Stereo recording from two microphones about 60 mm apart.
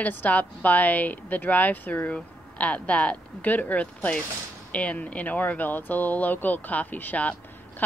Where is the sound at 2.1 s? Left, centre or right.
Left.